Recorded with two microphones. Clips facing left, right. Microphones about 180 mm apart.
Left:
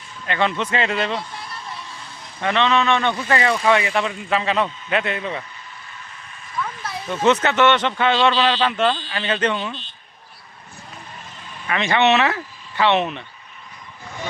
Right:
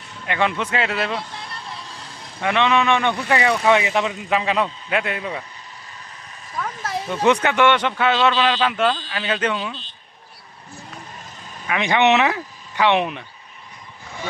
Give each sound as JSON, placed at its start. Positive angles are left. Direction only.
{"t": 0.3, "sound": "speech", "side_deg": -10}
{"t": 2.4, "sound": "speech", "side_deg": -10}
{"t": 6.5, "sound": "vehicle", "side_deg": -40}
{"t": 7.1, "sound": "speech", "side_deg": -15}
{"t": 11.7, "sound": "speech", "side_deg": -15}